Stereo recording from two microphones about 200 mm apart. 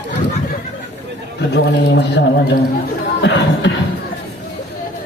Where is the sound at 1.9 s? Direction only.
60° left (ahead or behind).